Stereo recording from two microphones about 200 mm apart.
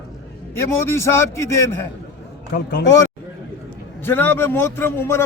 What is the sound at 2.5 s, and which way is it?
Speech, 60° left (ahead or behind).